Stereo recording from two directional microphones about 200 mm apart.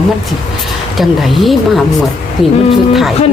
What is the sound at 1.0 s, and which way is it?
Speech, centre (ahead or behind).